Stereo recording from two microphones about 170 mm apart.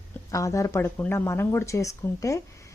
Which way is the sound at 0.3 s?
20° left (ahead or behind).